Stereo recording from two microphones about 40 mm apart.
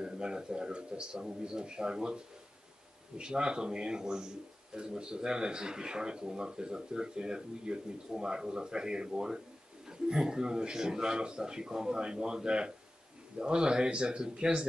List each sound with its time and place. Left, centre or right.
0.0 s a man's voice: centre